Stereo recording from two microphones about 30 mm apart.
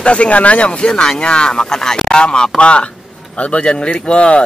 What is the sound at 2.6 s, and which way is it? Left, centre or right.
A man's voice, left.